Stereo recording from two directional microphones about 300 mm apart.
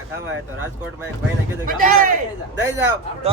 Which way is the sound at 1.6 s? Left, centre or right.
Right.